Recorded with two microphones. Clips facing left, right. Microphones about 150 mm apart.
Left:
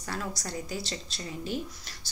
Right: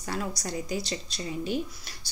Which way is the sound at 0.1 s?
15° right (ahead or behind).